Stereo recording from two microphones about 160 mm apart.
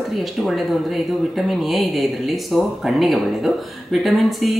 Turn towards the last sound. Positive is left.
turn(degrees=0)  # may be behind; listen again after turning